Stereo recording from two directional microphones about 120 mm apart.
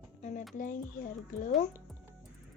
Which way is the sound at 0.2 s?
80° left.